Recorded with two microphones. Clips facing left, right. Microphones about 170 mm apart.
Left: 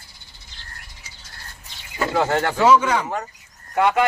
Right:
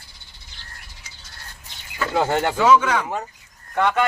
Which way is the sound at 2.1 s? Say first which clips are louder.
Even; 15° right (ahead or behind).